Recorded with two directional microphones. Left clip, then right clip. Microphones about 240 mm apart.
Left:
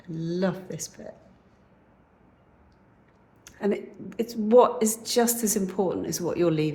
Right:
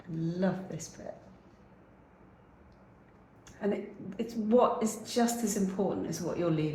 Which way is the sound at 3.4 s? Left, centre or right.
Left.